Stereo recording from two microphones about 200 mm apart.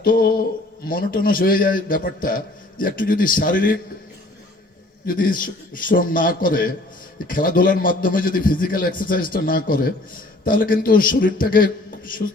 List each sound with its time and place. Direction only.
0.0 s a sound: 45° left (ahead or behind)
0.9 s a man's voice: 45° left (ahead or behind)
5.0 s a man's voice: 45° left (ahead or behind)